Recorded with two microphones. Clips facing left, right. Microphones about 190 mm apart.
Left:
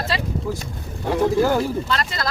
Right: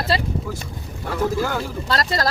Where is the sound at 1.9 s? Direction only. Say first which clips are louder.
Right 3 dB; 40° right (ahead or behind).